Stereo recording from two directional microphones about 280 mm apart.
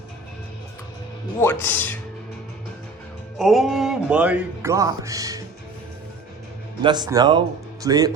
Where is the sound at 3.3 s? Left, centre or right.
Centre.